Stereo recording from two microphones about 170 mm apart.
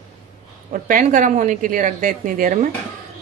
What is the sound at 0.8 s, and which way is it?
A woman's voice, 50° right (ahead or behind).